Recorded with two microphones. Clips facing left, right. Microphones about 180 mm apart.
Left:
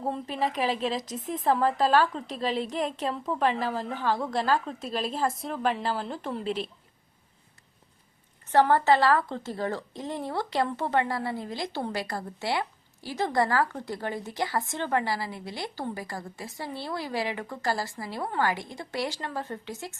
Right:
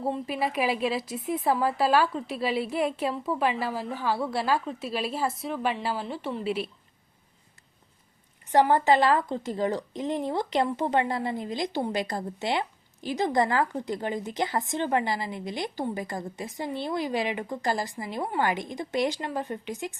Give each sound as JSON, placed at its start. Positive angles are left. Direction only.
{"t": 0.0, "sound": "a woman's voice", "side_deg": -10}
{"t": 8.4, "sound": "a woman's voice", "side_deg": -15}